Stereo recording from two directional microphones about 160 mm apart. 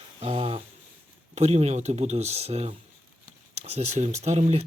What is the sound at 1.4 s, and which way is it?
A man's voice, 45° right (ahead or behind).